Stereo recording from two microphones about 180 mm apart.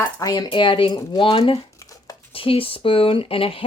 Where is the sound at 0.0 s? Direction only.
20° left (ahead or behind).